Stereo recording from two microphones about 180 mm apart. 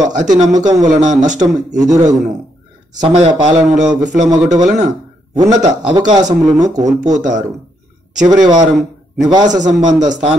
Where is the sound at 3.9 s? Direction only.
20° right (ahead or behind).